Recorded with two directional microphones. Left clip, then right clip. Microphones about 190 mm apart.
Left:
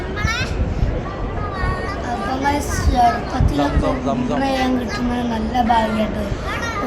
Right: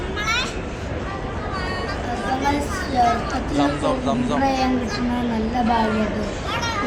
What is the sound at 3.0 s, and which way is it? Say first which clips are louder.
Speech: left 3 dB; 10° left (ahead or behind).